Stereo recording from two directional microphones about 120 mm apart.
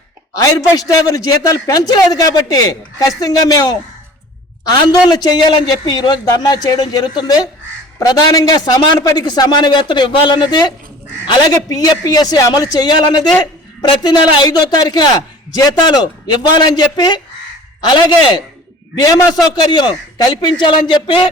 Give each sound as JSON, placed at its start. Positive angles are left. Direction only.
{"t": 0.3, "sound": "a man's voice", "side_deg": 30}
{"t": 18.9, "sound": "a man's voice", "side_deg": 30}